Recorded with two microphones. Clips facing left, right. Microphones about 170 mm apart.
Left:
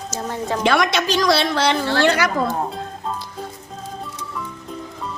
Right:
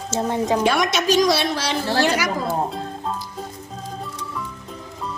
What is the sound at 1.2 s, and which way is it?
Speech, 65° left (ahead or behind).